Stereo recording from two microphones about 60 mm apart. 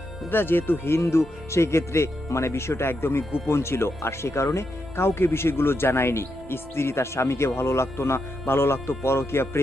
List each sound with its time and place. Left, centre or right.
0.3 s speech: left